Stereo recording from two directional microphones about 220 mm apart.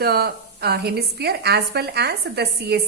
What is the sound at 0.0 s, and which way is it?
A woman's voice, 45° right (ahead or behind).